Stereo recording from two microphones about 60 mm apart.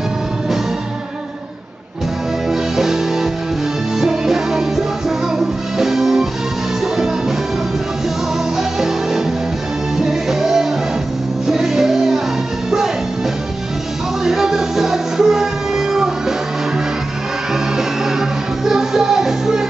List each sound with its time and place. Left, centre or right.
2.5 s music: centre
8.5 s music: centre
14.2 s music: centre
18.7 s music: centre